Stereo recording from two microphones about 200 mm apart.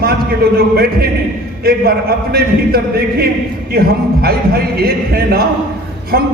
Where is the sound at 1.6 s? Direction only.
50° right (ahead or behind).